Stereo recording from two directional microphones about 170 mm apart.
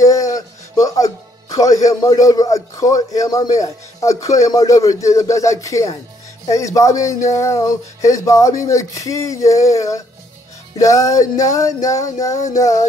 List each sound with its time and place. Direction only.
0.0 s speech: 20° left (ahead or behind)